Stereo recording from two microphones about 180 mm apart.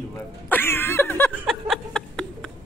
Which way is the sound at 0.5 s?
10° left (ahead or behind).